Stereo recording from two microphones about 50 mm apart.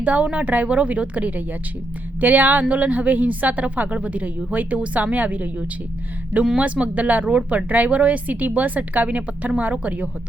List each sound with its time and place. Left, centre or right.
0.0 s a woman's voice: right